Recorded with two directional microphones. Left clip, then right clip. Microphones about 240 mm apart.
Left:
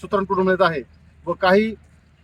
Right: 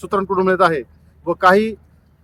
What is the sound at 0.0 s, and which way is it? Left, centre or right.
Speech, centre.